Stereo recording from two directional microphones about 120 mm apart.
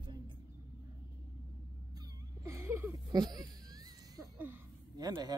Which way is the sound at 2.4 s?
25° right (ahead or behind).